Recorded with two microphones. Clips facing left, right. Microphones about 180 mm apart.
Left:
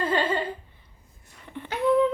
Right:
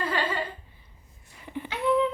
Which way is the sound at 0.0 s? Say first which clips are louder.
Left 4 dB; 25° left (ahead or behind).